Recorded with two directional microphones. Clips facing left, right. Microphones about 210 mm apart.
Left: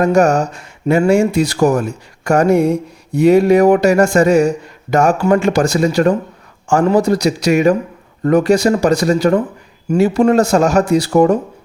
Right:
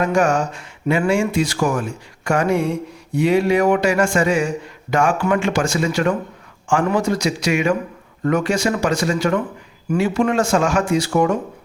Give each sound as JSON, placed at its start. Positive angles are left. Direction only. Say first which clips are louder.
{"t": 0.0, "sound": "speech", "louder": "left 5 dB", "side_deg": 40}